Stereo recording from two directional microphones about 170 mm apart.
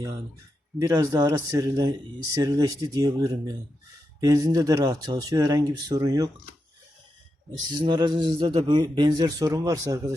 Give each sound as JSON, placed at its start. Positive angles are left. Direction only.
{"t": 0.8, "sound": "speech", "side_deg": -20}
{"t": 7.7, "sound": "speech", "side_deg": -25}